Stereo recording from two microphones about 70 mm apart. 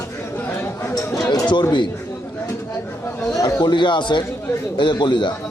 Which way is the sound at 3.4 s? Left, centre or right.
Left.